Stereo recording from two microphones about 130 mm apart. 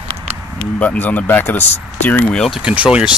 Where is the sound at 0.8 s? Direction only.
15° left (ahead or behind).